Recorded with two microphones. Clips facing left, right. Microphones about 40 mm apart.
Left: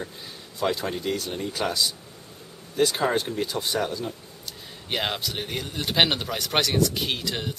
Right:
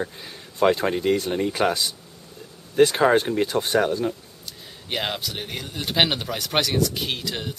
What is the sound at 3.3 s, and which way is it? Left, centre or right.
Speech, right.